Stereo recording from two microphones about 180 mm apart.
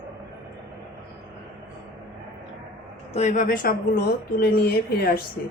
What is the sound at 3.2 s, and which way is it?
Speech, 45° left (ahead or behind).